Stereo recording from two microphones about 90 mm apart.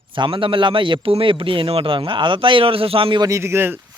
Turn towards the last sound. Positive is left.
turn(degrees=-25)  # may be behind; listen again after turning